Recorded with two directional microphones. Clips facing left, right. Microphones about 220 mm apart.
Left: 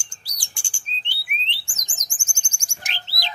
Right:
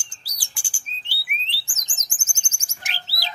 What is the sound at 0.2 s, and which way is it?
Chirp, 5° right (ahead or behind).